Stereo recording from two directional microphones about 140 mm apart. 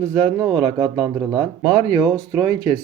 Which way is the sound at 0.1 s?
25° right (ahead or behind).